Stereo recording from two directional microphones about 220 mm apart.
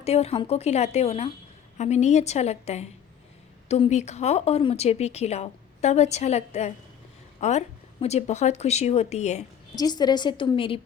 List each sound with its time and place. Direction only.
0.0 s a woman's voice: 30° left (ahead or behind)
9.7 s speech: 20° left (ahead or behind)